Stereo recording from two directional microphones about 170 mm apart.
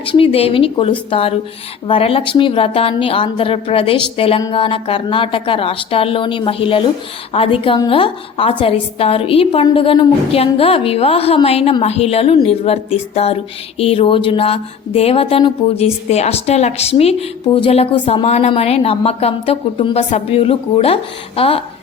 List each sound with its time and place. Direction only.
0.0 s speech: 30° left (ahead or behind)